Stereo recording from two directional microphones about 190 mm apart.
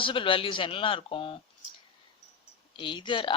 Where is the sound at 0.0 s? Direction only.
25° left (ahead or behind).